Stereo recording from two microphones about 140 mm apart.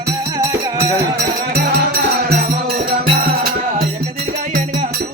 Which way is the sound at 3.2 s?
90° right.